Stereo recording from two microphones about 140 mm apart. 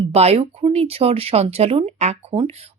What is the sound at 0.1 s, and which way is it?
Speech, 45° right (ahead or behind).